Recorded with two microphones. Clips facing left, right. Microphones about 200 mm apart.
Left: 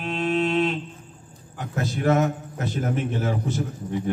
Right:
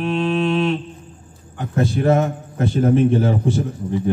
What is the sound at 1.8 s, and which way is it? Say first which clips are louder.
A man's voice: right 4 dB; 30° right (ahead or behind).